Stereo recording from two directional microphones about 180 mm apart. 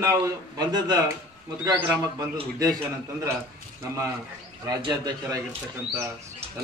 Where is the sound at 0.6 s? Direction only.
25° right (ahead or behind).